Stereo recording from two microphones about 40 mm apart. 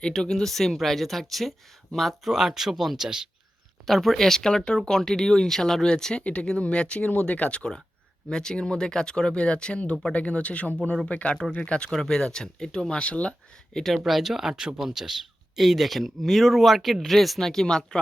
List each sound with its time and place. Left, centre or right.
0.0 s speech: centre
6.2 s speech: left
7.1 s speech: left
7.5 s speech: left
11.9 s speech: centre
13.7 s speech: centre
14.0 s speech: centre
17.5 s speech: centre